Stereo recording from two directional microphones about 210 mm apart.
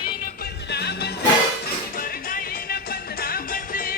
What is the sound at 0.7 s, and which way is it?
Music, 50° left (ahead or behind).